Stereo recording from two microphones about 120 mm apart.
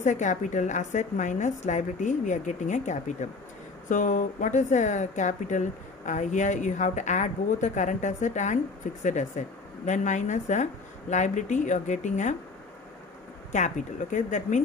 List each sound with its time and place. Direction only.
0.0 s a woman's voice: 90° left
13.5 s a woman's voice: 90° left